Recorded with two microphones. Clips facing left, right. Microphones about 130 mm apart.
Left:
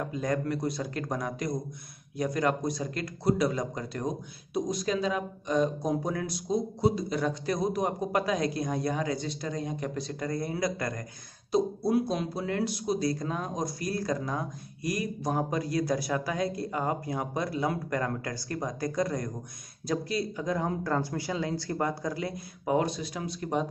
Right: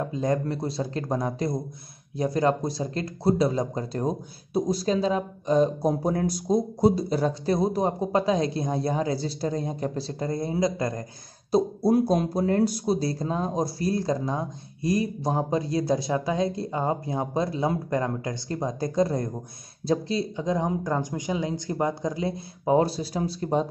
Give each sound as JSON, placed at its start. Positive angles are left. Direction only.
{"t": 0.0, "sound": "speech", "side_deg": -25}
{"t": 11.5, "sound": "speech", "side_deg": -40}